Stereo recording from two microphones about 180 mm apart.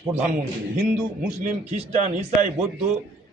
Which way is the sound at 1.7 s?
35° right (ahead or behind).